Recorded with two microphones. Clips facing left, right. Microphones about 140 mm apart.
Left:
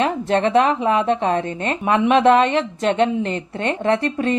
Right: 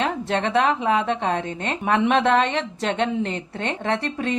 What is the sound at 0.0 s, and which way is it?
A woman's voice, 45° left (ahead or behind).